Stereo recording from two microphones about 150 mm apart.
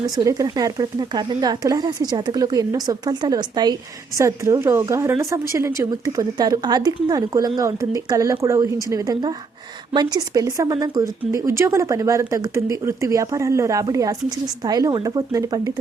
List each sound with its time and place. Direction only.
0.0 s speech: 25° right (ahead or behind)